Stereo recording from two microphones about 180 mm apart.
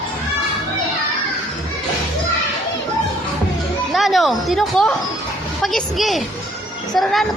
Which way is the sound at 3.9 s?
Centre (ahead or behind).